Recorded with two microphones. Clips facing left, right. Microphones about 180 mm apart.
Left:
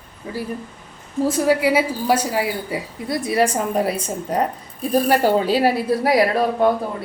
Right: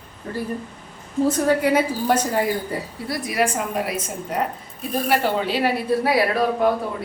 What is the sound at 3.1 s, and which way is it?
A woman's voice, 25° left (ahead or behind).